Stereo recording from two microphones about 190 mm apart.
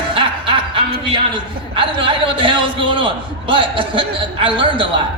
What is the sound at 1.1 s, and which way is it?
A man's voice, 25° right (ahead or behind).